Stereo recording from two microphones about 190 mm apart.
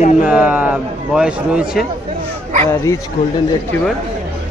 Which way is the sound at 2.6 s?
15° left (ahead or behind).